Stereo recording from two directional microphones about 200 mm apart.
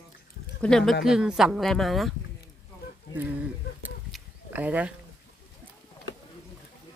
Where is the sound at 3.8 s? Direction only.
10° right (ahead or behind).